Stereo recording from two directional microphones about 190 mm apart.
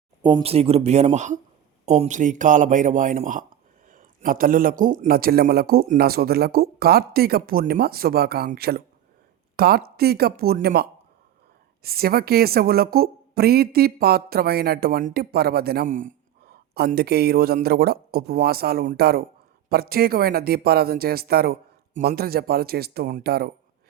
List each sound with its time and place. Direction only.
0.2 s a woman's voice: 20° right (ahead or behind); by 23.5 s 55° right (ahead or behind)